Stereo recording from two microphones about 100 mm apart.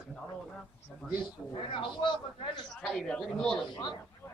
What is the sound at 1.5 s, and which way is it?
Speech, 55° left (ahead or behind).